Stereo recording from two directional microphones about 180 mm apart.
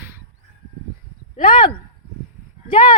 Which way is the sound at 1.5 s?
25° left (ahead or behind).